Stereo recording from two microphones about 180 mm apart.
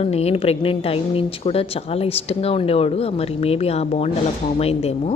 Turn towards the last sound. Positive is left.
turn(degrees=35)  # may be behind; listen again after turning